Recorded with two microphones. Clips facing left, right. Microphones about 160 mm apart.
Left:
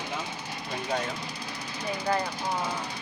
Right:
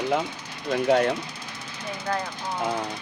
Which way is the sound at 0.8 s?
70° right (ahead or behind).